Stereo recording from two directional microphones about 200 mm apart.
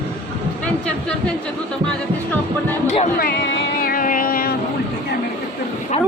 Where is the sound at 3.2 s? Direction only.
55° left (ahead or behind).